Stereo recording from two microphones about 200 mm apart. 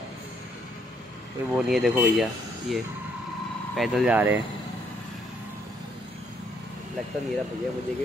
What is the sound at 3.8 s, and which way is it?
Speech, 5° right (ahead or behind).